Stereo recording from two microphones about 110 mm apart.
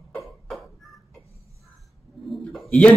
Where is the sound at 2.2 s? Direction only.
Centre (ahead or behind).